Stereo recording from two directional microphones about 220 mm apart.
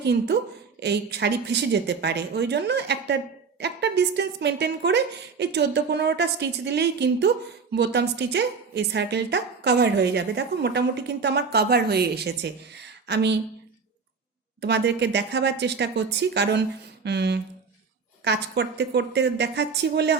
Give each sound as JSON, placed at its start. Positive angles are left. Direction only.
{"t": 0.0, "sound": "a woman's voice", "side_deg": -50}
{"t": 14.6, "sound": "a woman's voice", "side_deg": -50}
{"t": 17.0, "sound": "a sound", "side_deg": -50}
{"t": 18.3, "sound": "a woman's voice", "side_deg": -50}